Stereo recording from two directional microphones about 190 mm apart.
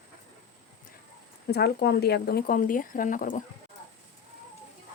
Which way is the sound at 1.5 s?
60° left (ahead or behind).